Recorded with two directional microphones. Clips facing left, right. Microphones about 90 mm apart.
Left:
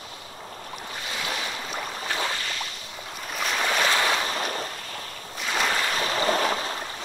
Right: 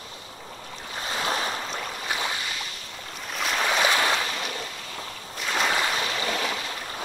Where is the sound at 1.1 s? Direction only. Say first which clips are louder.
Right 5 dB; 35° right (ahead or behind).